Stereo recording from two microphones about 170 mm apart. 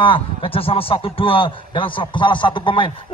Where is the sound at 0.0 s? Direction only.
30° left (ahead or behind).